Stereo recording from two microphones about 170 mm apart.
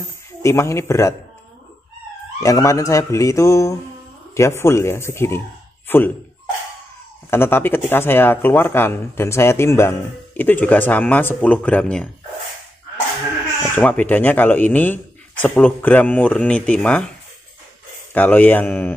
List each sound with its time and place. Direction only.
0.4 s speech: 15° left (ahead or behind)
2.4 s speech: 20° left (ahead or behind)
7.2 s speech: 15° left (ahead or behind)
13.7 s speech: 10° left (ahead or behind)
18.1 s speech: 10° left (ahead or behind)